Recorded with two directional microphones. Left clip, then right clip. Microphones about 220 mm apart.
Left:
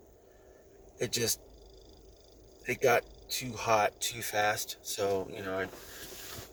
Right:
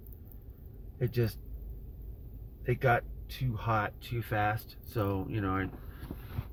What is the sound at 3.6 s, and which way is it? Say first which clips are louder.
Speech: left 5 dB; 15° left (ahead or behind).